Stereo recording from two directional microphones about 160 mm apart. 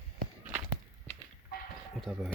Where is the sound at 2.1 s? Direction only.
5° left (ahead or behind).